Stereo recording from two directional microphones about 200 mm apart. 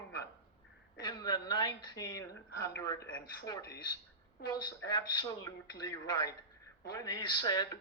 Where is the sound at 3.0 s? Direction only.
50° left (ahead or behind).